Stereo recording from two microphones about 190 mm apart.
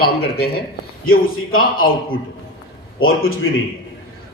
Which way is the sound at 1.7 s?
90° left.